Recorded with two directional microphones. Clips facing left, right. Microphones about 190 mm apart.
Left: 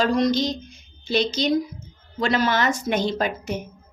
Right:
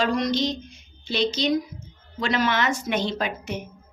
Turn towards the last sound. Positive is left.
turn(degrees=40)  # may be behind; listen again after turning